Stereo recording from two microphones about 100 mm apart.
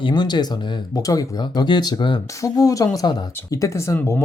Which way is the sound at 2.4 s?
35° left (ahead or behind).